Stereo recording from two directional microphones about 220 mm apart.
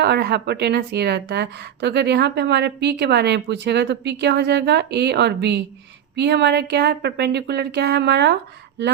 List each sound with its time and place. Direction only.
0.0 s a woman's voice: 50° right (ahead or behind)